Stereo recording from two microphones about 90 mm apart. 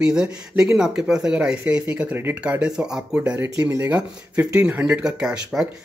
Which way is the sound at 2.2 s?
20° right (ahead or behind).